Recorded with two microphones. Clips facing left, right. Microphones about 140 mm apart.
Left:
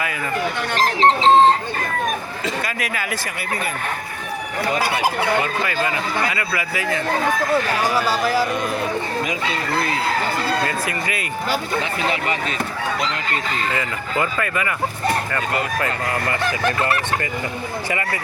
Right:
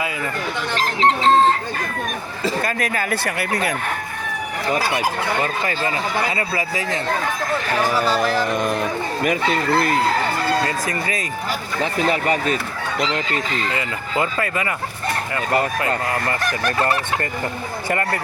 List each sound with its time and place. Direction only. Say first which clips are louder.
0.8 s speech: left 3 dB; 35° left (ahead or behind)
2.4 s speech: right 8 dB; 45° right (ahead or behind)
6.3 s speech: right 1 dB; 35° right (ahead or behind)
8.0 s speech: even; 10° left (ahead or behind)
10.7 s speech: right 1 dB; 40° right (ahead or behind)
13.7 s speech: even; 30° right (ahead or behind)
17.8 s speech: right 5 dB; 55° right (ahead or behind)